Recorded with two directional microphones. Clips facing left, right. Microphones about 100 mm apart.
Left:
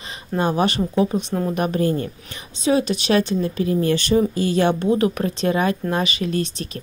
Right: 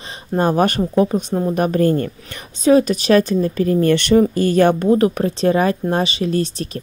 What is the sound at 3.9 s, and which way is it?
Speech, 65° right (ahead or behind).